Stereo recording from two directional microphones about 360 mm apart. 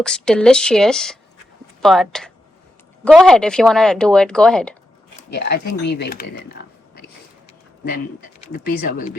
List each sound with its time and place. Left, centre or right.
0.0 s speech: centre
5.3 s speech: left
8.5 s speech: left